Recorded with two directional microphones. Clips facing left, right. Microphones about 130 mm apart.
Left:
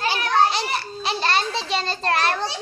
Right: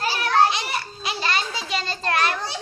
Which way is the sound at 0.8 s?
30° left (ahead or behind).